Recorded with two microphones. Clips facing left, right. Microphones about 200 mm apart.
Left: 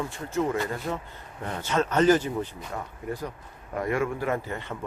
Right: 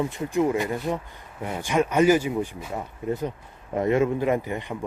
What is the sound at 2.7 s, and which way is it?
Speech, 20° right (ahead or behind).